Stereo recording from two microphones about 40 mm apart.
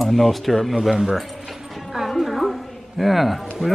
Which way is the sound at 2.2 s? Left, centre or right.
Centre.